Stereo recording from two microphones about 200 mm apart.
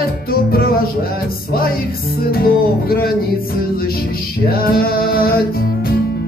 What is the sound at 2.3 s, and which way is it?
Music, 50° left (ahead or behind).